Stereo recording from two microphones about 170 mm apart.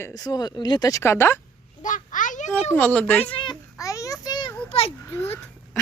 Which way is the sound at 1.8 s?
50° left (ahead or behind).